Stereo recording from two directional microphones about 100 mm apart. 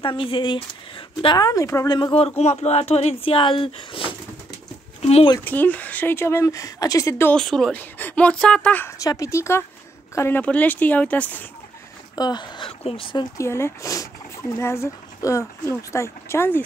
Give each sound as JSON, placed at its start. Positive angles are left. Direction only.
{"t": 0.0, "sound": "a woman's voice", "side_deg": 60}
{"t": 1.4, "sound": "speech", "side_deg": 35}
{"t": 1.9, "sound": "speech", "side_deg": 45}
{"t": 2.1, "sound": "speech", "side_deg": 85}
{"t": 3.3, "sound": "speech", "side_deg": 60}
{"t": 5.0, "sound": "speech", "side_deg": 90}
{"t": 5.4, "sound": "speech", "side_deg": 15}
{"t": 7.3, "sound": "speech", "side_deg": 5}
{"t": 7.7, "sound": "speech", "side_deg": 15}
{"t": 8.8, "sound": "speech", "side_deg": 35}
{"t": 12.2, "sound": "speech", "side_deg": 45}
{"t": 12.8, "sound": "speech", "side_deg": 65}
{"t": 13.4, "sound": "speech", "side_deg": 25}